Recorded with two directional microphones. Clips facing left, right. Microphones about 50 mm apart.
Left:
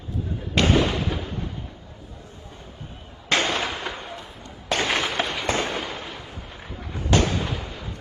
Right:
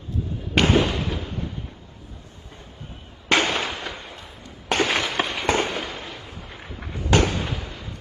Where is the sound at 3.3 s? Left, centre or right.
Right.